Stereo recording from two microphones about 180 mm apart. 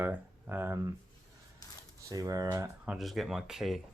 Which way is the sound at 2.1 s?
20° right (ahead or behind).